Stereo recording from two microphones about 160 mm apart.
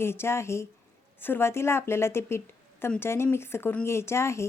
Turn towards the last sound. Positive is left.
turn(degrees=15)  # may be behind; listen again after turning